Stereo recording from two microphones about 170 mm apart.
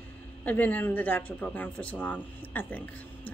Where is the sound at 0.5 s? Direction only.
10° left (ahead or behind).